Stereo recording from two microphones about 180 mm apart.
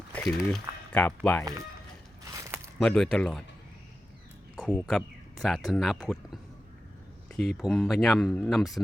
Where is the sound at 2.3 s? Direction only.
15° right (ahead or behind).